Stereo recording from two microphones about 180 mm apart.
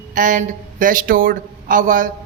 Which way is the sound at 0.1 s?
50° right (ahead or behind).